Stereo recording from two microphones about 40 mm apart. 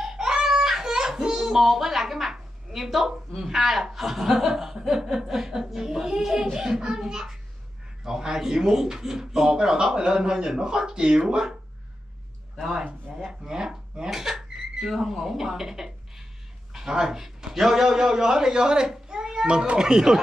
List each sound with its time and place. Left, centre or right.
0.0 s a sound: centre
2.7 s a man's voice: centre
13.3 s speech: centre
19.0 s a sound: centre
19.4 s speech: right
19.8 s speech: centre